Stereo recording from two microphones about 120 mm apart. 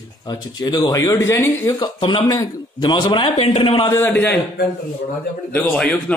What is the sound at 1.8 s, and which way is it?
A man's voice, 45° left (ahead or behind).